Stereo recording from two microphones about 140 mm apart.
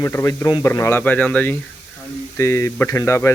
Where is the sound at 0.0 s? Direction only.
20° left (ahead or behind).